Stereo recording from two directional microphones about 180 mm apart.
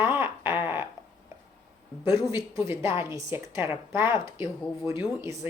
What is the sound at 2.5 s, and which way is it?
A woman's voice, 15° right (ahead or behind).